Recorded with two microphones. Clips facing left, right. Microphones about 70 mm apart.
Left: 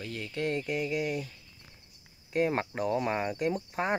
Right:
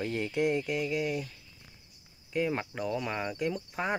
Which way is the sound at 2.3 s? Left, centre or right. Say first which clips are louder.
Left 3 dB; left.